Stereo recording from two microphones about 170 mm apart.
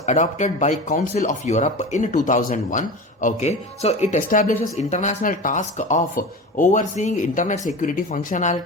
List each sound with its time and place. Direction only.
0.0 s speech: 45° left (ahead or behind)